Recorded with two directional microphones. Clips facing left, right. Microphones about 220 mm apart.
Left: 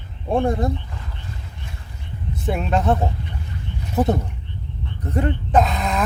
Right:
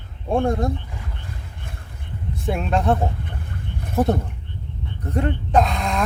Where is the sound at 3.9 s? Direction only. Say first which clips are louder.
Even; centre (ahead or behind).